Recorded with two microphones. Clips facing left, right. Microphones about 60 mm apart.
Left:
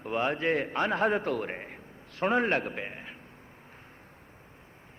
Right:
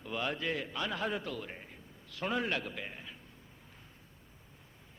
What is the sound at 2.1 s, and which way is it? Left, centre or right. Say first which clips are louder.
A man's voice: left 8 dB; left.